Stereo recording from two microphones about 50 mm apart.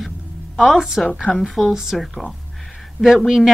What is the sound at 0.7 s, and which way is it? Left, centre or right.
A woman's voice, centre.